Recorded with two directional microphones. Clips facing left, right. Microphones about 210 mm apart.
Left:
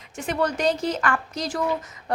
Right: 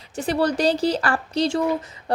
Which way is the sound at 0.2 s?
35° right (ahead or behind).